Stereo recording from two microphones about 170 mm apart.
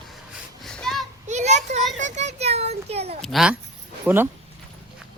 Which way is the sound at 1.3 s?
45° right (ahead or behind).